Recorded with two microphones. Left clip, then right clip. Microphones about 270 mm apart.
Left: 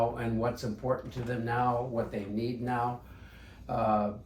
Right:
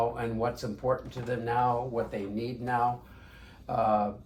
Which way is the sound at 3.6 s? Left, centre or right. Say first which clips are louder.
Right 2 dB; centre.